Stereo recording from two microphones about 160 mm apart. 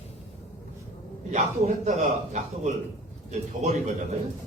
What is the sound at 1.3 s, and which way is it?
A man's voice, 45° right (ahead or behind).